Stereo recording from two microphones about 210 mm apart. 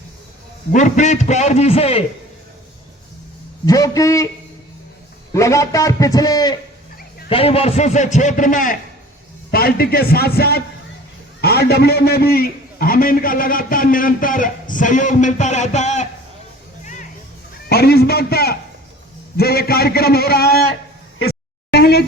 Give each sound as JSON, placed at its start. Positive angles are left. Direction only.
{"t": 0.7, "sound": "a man's voice", "side_deg": 35}
{"t": 3.7, "sound": "a man's voice", "side_deg": 15}
{"t": 5.3, "sound": "a man's voice", "side_deg": 15}
{"t": 17.7, "sound": "a man's voice", "side_deg": 50}
{"t": 21.7, "sound": "a sound", "side_deg": 50}